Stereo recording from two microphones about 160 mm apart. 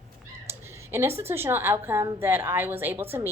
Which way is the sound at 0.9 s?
15° right (ahead or behind).